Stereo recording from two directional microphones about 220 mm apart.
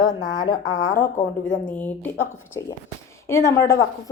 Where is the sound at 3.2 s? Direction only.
10° left (ahead or behind).